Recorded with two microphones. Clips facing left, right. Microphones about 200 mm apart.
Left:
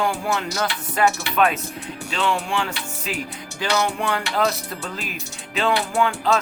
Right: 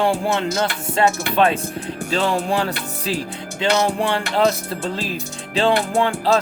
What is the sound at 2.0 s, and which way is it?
Speech, 40° right (ahead or behind).